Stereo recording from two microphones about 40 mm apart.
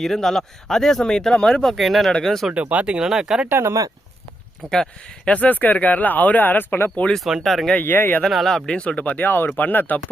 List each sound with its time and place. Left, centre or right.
0.0 s speech: centre
1.7 s speech: centre
2.5 s speech: right
3.0 s speech: centre
4.7 s speech: centre
5.3 s speech: left
7.0 s speech: left
7.4 s speech: centre
7.8 s speech: left
8.3 s speech: centre
8.6 s speech: left
9.0 s speech: left
9.2 s speech: left
9.6 s speech: left